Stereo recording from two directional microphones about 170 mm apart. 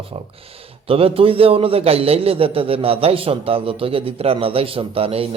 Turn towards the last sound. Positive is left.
turn(degrees=-35)  # may be behind; listen again after turning